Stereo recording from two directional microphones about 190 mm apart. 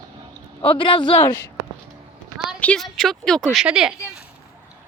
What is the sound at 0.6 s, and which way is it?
Speech, 25° left (ahead or behind).